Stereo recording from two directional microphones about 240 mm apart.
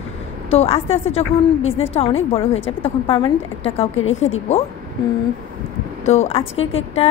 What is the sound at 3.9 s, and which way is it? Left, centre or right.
Speech, left.